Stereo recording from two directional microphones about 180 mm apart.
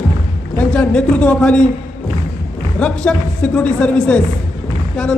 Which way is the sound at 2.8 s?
5° left (ahead or behind).